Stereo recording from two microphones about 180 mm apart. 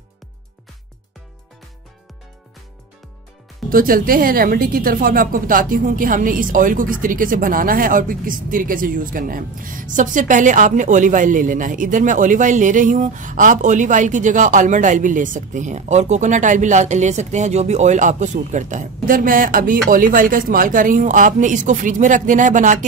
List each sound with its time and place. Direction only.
3.7 s speech: 50° right (ahead or behind)